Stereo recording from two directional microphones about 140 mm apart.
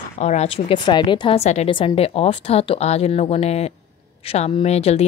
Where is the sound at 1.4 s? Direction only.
55° left (ahead or behind).